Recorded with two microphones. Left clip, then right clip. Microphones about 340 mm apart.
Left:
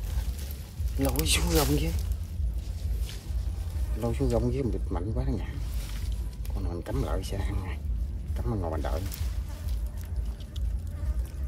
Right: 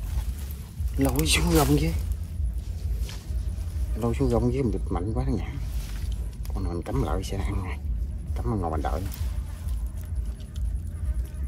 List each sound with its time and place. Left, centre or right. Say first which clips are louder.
0.9 s speech: right 4 dB; centre
4.0 s speech: right 3 dB; centre
6.6 s speech: right 4 dB; centre